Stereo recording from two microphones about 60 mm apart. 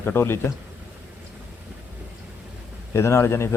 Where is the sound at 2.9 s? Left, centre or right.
Left.